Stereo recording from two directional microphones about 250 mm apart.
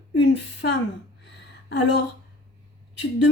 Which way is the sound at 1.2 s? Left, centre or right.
Left.